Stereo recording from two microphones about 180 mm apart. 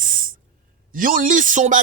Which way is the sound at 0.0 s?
50° right (ahead or behind).